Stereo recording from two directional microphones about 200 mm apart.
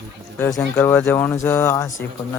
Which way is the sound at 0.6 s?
10° left (ahead or behind).